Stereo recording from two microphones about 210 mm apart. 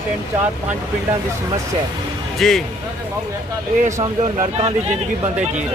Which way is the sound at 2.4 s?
Centre (ahead or behind).